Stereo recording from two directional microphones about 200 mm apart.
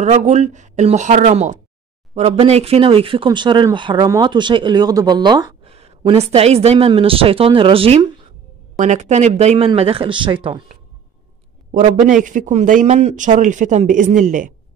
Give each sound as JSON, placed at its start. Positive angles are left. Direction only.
{"t": 0.0, "sound": "a man's voice", "side_deg": -35}
{"t": 11.7, "sound": "a man's voice", "side_deg": -40}